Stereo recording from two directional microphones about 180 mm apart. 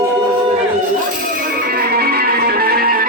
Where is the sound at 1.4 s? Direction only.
55° right (ahead or behind).